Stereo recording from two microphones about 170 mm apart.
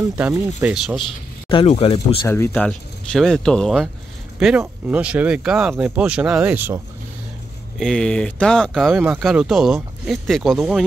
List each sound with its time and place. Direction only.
0.2 s speech: 15° right (ahead or behind)
1.5 s speech: 35° left (ahead or behind)
2.2 s speech: 15° left (ahead or behind); by 6.8 s 10° right (ahead or behind)
7.8 s speech: 5° left (ahead or behind)